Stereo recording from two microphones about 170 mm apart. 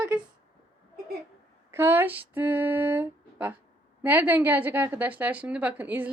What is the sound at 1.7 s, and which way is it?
A woman's voice, 10° right (ahead or behind).